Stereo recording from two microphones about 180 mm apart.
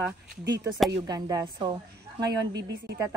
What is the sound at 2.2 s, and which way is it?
Speech, 75° right (ahead or behind).